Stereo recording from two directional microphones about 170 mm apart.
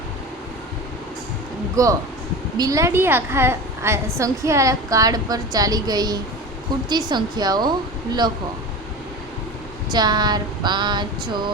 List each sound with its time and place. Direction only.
1.7 s a woman's voice: 20° right (ahead or behind)
9.9 s a woman's voice: 25° right (ahead or behind)